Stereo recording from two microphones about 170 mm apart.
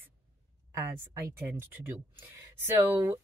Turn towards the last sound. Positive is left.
turn(degrees=-20)  # may be behind; listen again after turning